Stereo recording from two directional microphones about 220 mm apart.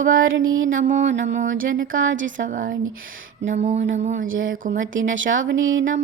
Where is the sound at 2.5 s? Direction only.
40° right (ahead or behind).